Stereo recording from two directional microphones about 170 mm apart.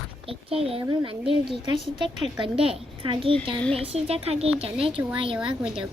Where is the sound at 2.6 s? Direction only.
30° right (ahead or behind).